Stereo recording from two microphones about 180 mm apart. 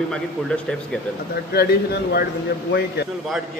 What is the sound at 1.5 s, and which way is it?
Speech, 60° left (ahead or behind).